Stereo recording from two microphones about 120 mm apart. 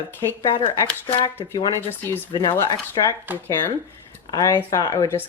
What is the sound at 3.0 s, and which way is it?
Speech, 40° left (ahead or behind).